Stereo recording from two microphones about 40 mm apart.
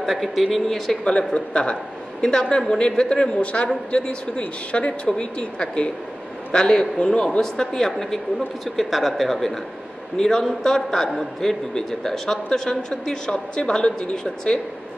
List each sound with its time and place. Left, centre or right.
0.2 s speech: centre
1.0 s a man's voice: left
8.6 s a man's voice: centre
11.7 s speech: centre